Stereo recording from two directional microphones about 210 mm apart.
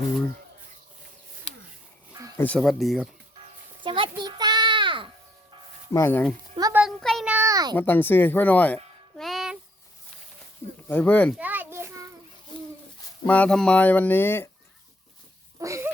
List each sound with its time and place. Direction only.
2.4 s speech: 5° left (ahead or behind)
3.8 s children playing: 25° right (ahead or behind)
5.9 s speech: 10° left (ahead or behind)
6.7 s a sound: centre (ahead or behind); by 7.8 s 15° right (ahead or behind)
7.8 s speech: 10° left (ahead or behind)
10.8 s speech: 5° left (ahead or behind)
11.3 s a sound: 10° right (ahead or behind)
13.2 s speech: 5° left (ahead or behind)
15.5 s a sound: 15° right (ahead or behind)